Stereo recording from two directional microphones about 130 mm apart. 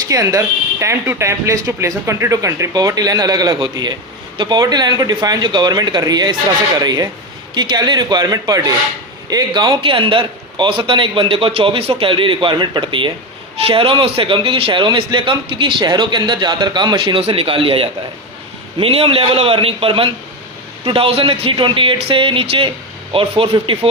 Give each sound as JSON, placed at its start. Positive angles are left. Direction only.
{"t": 0.1, "sound": "a man's voice", "side_deg": -25}